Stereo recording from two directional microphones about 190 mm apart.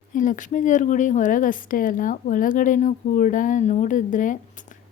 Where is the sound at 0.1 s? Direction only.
45° left (ahead or behind).